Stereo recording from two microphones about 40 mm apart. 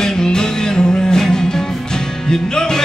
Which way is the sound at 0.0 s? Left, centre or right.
Centre.